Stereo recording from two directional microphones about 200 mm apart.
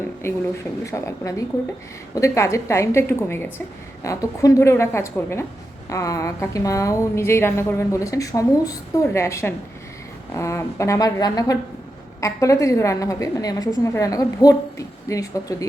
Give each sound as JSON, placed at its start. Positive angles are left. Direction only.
{"t": 0.9, "sound": "a woman's voice", "side_deg": 15}